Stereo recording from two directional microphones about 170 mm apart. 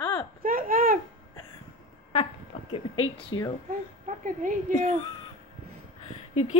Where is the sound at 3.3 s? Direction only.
25° left (ahead or behind).